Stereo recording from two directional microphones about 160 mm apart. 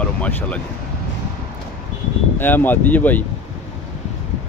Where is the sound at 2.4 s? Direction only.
10° left (ahead or behind).